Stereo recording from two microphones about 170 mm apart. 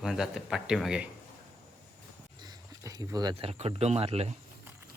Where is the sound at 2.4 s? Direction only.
20° right (ahead or behind).